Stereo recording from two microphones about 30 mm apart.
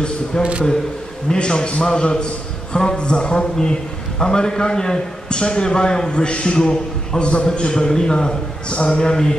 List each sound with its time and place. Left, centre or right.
0.4 s speech: right
1.3 s a man's voice: left
7.2 s a man's voice: left